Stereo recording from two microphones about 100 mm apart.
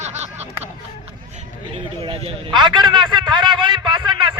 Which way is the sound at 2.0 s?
70° right (ahead or behind).